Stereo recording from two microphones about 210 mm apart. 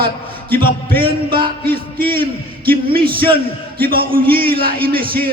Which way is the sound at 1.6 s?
45° right (ahead or behind).